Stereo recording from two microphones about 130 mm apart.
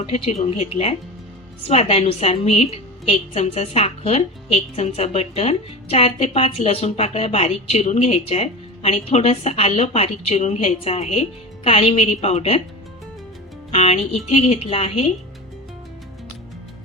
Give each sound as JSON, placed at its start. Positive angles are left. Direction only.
{"t": 0.1, "sound": "a woman's voice", "side_deg": 55}
{"t": 13.7, "sound": "a woman's voice", "side_deg": 55}